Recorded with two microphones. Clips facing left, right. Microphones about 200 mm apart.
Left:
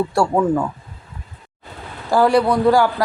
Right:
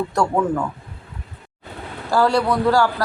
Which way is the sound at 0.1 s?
10° left (ahead or behind).